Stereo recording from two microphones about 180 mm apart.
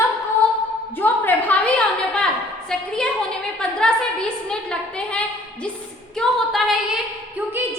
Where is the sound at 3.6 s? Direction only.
5° left (ahead or behind).